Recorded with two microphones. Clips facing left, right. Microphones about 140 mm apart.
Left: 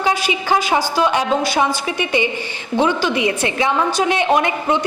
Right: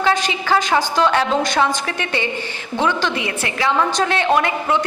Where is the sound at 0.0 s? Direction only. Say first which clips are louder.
Even; 10° left (ahead or behind).